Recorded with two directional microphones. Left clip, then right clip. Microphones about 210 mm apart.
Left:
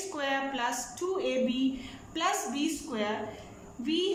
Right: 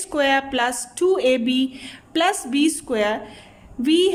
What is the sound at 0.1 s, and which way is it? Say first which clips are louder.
A woman's voice: right 13 dB; 45° right (ahead or behind).